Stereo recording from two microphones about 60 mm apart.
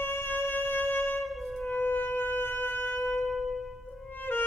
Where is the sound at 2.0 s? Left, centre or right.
Left.